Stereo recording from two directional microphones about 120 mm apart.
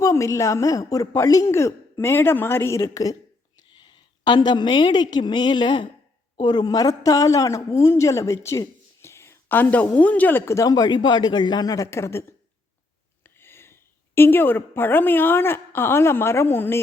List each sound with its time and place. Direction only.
0.0 s a woman's voice: 25° left (ahead or behind)
3.6 s a woman's voice: 40° left (ahead or behind)
8.4 s a sound: 25° left (ahead or behind)
10.0 s speech: 10° left (ahead or behind)
13.2 s a sound: 20° left (ahead or behind)
14.2 s a woman's voice: 15° left (ahead or behind)